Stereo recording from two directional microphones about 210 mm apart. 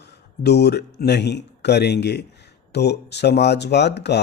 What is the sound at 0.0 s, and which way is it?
Speech, 55° left (ahead or behind).